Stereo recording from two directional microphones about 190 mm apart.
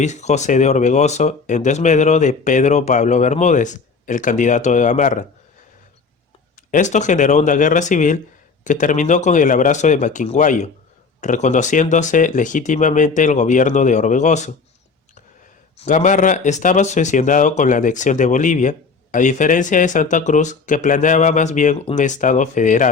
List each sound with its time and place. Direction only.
0.0 s speech: 35° left (ahead or behind)
6.7 s speech: 40° left (ahead or behind)
15.8 s speech: 40° left (ahead or behind)